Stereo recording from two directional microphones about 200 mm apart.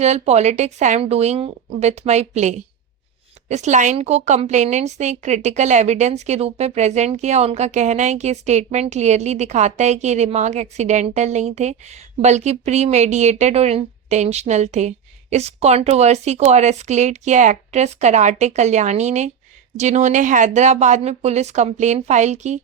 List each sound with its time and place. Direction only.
0.0 s a woman's voice: 35° right (ahead or behind)